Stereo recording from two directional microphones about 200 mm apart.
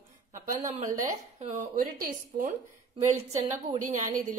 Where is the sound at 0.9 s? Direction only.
40° right (ahead or behind).